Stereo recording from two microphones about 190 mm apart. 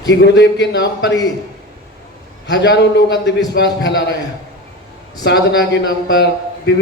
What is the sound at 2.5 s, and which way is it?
A man's voice, 60° left (ahead or behind).